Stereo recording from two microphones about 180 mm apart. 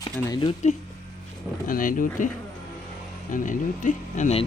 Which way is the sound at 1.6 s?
50° left (ahead or behind).